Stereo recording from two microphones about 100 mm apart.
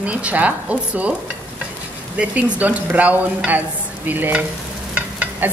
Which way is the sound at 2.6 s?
15° right (ahead or behind).